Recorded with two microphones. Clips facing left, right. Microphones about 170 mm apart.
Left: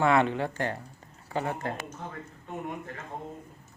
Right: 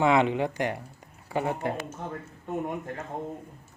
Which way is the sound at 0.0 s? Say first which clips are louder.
Right 2 dB; 15° right (ahead or behind).